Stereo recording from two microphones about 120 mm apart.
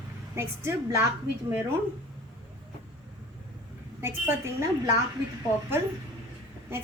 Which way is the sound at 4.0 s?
20° right (ahead or behind).